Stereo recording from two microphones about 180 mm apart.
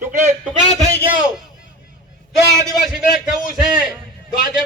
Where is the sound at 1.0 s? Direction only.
10° right (ahead or behind).